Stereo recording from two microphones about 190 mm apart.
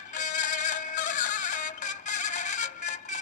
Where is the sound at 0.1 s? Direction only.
40° left (ahead or behind).